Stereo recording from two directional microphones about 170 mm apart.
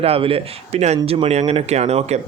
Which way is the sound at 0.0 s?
35° right (ahead or behind).